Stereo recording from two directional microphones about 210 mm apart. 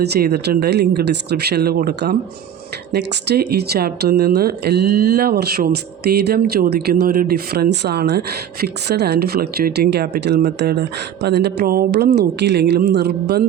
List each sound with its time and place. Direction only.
0.0 s speech: 50° right (ahead or behind)